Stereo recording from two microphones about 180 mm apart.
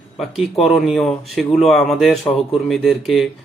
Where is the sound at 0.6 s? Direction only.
Centre (ahead or behind).